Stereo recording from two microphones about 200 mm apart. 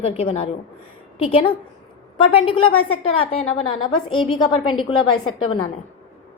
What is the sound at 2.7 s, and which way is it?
Speech, 90° left.